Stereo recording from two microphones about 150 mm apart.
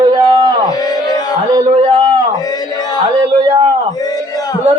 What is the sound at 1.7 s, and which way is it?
Speech, 40° right (ahead or behind).